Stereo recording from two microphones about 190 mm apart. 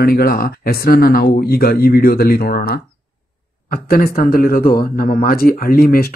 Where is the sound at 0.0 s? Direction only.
55° left (ahead or behind).